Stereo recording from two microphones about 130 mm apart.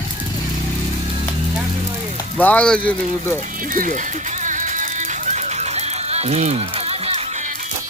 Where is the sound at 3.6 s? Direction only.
90° right; by 7.5 s 65° right (ahead or behind).